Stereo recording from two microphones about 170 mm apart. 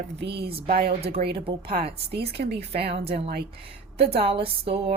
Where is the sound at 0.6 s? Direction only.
60° right (ahead or behind).